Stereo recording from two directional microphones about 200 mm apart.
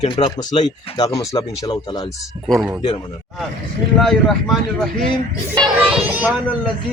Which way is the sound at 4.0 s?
Centre (ahead or behind).